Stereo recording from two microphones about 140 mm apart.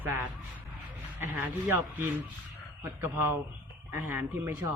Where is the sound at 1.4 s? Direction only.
15° right (ahead or behind).